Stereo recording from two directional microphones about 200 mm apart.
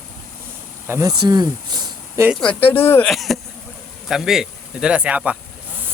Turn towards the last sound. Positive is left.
turn(degrees=-5)  # may be behind; listen again after turning